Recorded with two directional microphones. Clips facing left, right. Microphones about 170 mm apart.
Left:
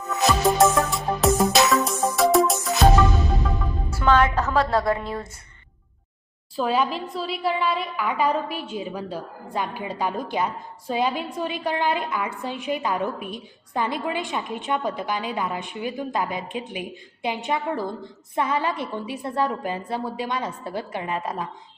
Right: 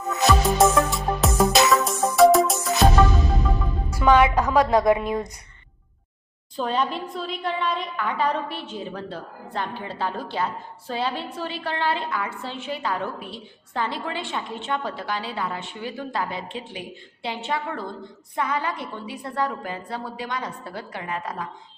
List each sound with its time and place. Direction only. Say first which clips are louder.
0.3 s music: even; centre (ahead or behind)
3.9 s a woman's voice: right 2 dB; 10° right (ahead or behind)
6.6 s a woman's voice: left 2 dB; 5° left (ahead or behind); by 21.5 s 25° left (ahead or behind)